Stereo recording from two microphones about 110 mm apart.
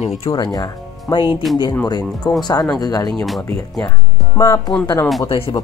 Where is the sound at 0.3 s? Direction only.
35° left (ahead or behind).